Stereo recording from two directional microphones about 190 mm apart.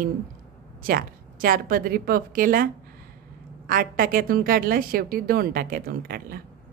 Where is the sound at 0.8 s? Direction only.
50° right (ahead or behind).